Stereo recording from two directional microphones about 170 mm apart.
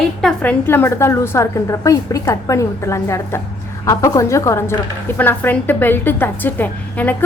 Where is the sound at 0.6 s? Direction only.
15° left (ahead or behind).